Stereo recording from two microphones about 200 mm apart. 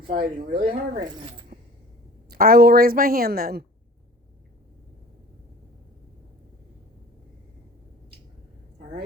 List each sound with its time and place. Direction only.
0.1 s a woman's voice: 45° right (ahead or behind)
0.6 s speech: 25° right (ahead or behind)
2.3 s a woman's voice: 50° right (ahead or behind)